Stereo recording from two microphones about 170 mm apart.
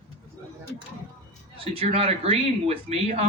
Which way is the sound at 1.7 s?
35° right (ahead or behind).